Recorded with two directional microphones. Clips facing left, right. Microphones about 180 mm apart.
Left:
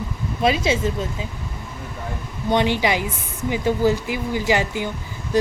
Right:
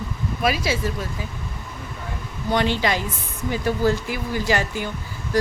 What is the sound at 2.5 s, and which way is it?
A woman's voice, 15° left (ahead or behind).